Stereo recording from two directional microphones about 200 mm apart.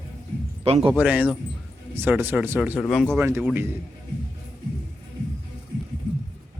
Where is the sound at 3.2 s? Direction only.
10° right (ahead or behind).